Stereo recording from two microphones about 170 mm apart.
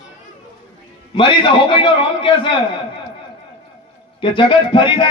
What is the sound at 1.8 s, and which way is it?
Speech, 30° left (ahead or behind).